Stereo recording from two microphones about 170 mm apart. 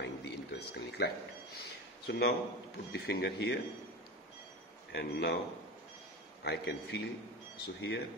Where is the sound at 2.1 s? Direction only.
70° left (ahead or behind).